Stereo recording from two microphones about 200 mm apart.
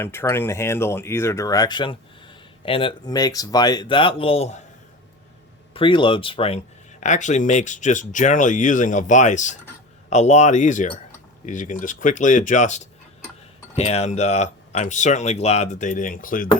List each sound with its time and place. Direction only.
0.0 s speech: 10° left (ahead or behind); by 4.6 s 30° left (ahead or behind)
5.7 s speech: 25° left (ahead or behind)
7.0 s speech: 35° left (ahead or behind)